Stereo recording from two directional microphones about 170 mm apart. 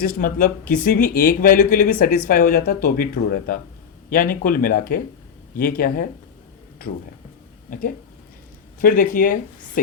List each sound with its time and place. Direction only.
0.0 s speech: 60° left (ahead or behind)
7.7 s speech: 55° left (ahead or behind)